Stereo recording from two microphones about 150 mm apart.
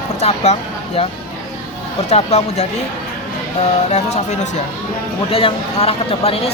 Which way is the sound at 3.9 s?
50° left (ahead or behind).